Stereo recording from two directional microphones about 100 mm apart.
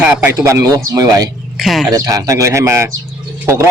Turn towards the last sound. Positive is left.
turn(degrees=-30)  # may be behind; listen again after turning